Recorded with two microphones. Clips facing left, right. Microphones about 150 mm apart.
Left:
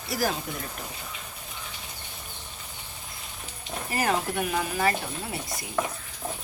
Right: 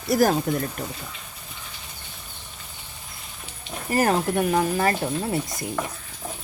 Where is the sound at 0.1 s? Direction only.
45° right (ahead or behind).